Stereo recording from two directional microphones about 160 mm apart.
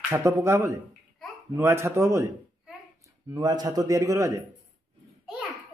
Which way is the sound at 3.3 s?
25° right (ahead or behind).